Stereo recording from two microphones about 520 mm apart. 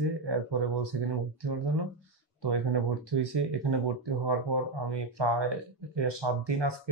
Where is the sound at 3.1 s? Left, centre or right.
Right.